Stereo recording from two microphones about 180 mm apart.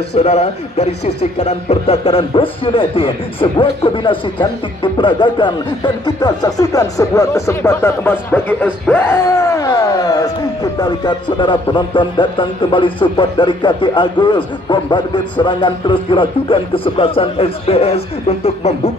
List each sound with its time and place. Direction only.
0.1 s speech: 35° left (ahead or behind)